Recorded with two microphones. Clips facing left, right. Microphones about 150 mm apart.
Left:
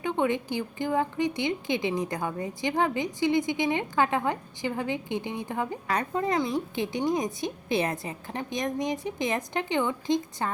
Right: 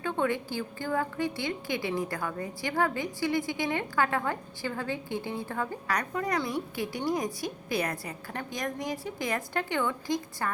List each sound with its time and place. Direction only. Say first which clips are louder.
0.0 s a woman's voice: left 3 dB; 20° left (ahead or behind)